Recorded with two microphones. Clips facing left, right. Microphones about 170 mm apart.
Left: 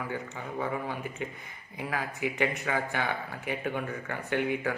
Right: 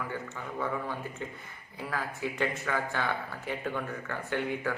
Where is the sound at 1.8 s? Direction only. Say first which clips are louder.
Left 2 dB; 15° left (ahead or behind).